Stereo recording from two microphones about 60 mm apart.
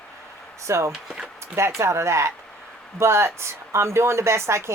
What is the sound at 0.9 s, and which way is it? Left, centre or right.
Speech, centre.